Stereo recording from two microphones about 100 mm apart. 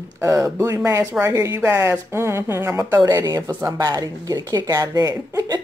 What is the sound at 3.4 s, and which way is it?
Speech, 25° right (ahead or behind).